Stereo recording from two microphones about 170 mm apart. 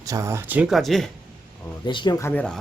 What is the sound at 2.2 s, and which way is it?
Speech, 5° left (ahead or behind).